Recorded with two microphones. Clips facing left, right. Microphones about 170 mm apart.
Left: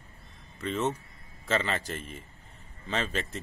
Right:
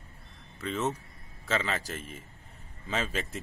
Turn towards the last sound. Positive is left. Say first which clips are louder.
# left 1 dB
turn(degrees=-5)  # may be behind; listen again after turning